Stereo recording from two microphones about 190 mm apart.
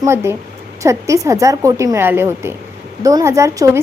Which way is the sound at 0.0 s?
15° right (ahead or behind).